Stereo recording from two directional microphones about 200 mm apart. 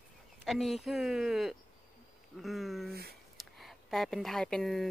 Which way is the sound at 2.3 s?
Centre (ahead or behind).